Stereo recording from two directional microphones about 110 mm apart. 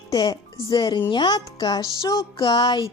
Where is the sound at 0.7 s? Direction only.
40° left (ahead or behind).